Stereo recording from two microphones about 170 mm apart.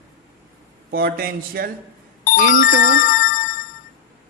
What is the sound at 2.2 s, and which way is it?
Speech, 50° left (ahead or behind).